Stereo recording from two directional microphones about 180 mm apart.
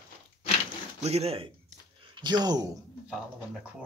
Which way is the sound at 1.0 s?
35° right (ahead or behind).